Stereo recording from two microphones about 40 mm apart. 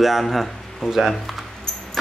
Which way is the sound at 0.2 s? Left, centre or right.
Centre.